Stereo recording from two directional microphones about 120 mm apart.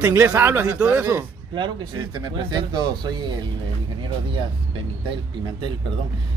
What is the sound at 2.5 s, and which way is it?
Speech, 35° right (ahead or behind).